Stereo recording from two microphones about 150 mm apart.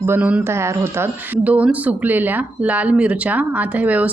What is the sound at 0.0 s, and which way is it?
A woman's voice, 15° right (ahead or behind).